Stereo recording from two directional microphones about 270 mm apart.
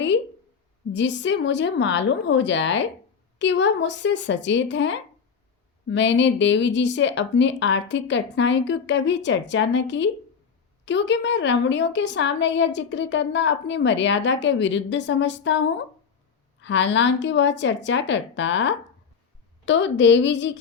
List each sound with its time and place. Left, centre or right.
0.9 s a woman's voice: left